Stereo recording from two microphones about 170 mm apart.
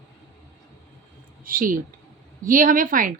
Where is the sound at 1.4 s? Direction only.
55° right (ahead or behind).